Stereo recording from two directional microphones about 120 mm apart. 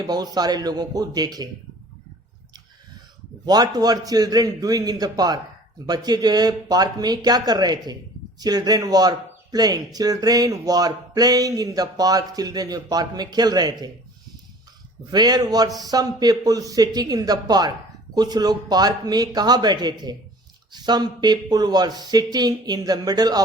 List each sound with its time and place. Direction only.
0.1 s speech: 35° right (ahead or behind)
3.4 s a man's voice: 35° right (ahead or behind)
15.1 s speech: 35° right (ahead or behind)